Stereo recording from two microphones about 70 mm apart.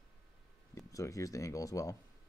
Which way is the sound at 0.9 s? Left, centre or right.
Left.